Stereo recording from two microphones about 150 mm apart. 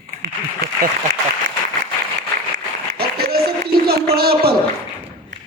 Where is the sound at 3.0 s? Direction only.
90° right.